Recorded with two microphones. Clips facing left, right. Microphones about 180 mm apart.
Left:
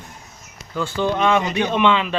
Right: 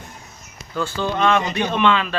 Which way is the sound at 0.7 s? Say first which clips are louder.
Left 2 dB; 15° left (ahead or behind).